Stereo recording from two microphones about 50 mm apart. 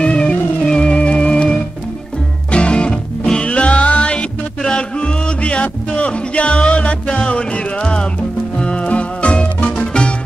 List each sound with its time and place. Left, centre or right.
0.0 s music: left